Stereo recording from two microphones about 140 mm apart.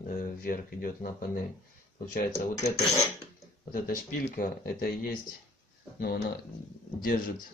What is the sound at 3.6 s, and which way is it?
Speech, 90° left.